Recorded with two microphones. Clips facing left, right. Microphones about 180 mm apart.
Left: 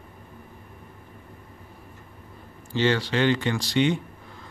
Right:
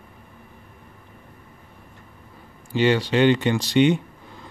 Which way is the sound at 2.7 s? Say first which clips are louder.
Right 4 dB; 15° right (ahead or behind).